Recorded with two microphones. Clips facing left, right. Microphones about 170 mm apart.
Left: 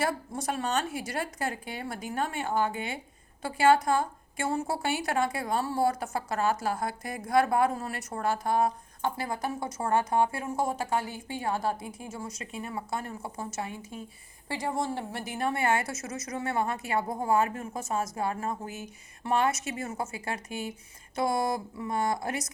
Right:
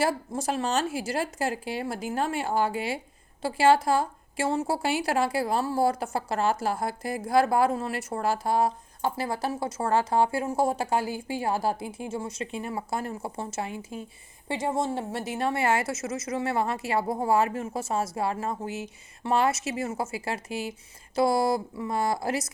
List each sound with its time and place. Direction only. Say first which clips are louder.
0.0 s a woman's voice: right 3 dB; 30° right (ahead or behind)